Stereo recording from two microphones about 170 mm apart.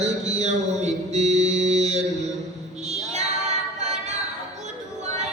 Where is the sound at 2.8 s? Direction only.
40° right (ahead or behind).